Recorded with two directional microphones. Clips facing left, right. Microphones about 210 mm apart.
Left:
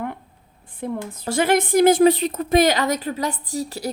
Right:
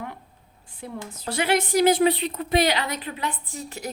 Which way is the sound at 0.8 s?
50° left (ahead or behind).